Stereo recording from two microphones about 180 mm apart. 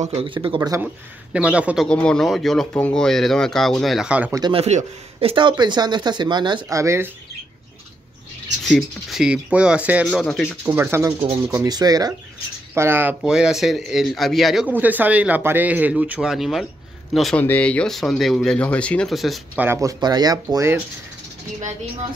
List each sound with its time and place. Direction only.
0.0 s speech: 35° right (ahead or behind)
0.6 s speech: 15° right (ahead or behind)
1.9 s speech: 5° left (ahead or behind)
4.3 s speech: 25° right (ahead or behind)
8.6 s speech: centre (ahead or behind)
10.0 s speech: 5° left (ahead or behind)
10.6 s speech: 15° right (ahead or behind)
19.6 s speech: 15° right (ahead or behind)